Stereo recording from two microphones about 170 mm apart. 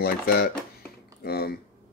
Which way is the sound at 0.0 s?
65° left (ahead or behind).